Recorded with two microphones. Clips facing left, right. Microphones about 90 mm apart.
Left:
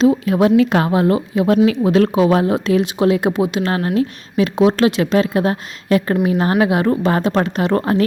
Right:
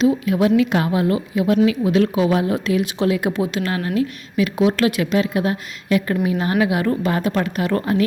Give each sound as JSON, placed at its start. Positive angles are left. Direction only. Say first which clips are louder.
{"t": 0.0, "sound": "a woman's voice", "louder": "left 3 dB", "side_deg": 30}
{"t": 3.7, "sound": "a woman's voice", "louder": "left 3 dB", "side_deg": 40}